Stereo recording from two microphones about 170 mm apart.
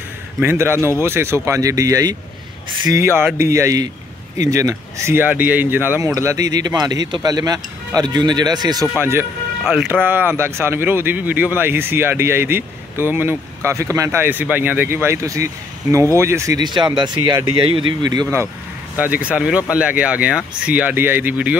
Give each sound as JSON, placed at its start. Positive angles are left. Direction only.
{"t": 0.4, "sound": "speech", "side_deg": -15}
{"t": 19.2, "sound": "speech", "side_deg": -5}